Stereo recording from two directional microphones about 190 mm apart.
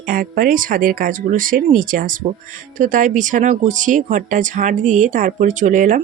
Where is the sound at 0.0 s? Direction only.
50° right (ahead or behind).